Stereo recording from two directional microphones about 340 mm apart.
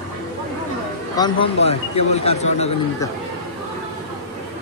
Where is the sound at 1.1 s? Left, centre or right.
Centre.